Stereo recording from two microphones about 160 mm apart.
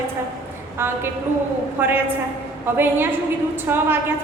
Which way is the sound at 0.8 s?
15° right (ahead or behind).